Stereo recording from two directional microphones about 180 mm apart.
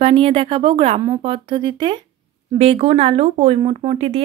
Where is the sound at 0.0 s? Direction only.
35° right (ahead or behind).